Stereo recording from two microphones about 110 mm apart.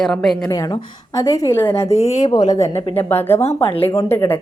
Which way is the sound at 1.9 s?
85° left.